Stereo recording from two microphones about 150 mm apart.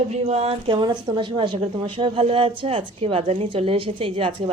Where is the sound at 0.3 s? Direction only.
45° right (ahead or behind).